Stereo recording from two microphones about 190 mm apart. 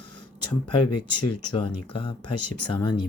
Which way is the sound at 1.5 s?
25° left (ahead or behind).